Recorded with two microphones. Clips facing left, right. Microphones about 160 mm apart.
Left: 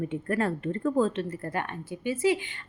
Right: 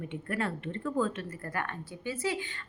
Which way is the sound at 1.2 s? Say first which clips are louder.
Left 5 dB; 25° left (ahead or behind).